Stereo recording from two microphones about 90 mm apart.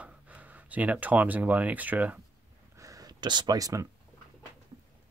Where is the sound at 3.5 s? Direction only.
40° right (ahead or behind).